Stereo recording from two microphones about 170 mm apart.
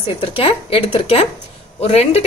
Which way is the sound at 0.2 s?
35° left (ahead or behind).